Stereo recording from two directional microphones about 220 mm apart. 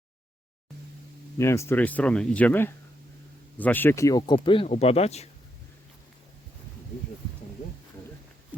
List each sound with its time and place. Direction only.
1.4 s speech: 10° left (ahead or behind); by 5.3 s 30° left (ahead or behind)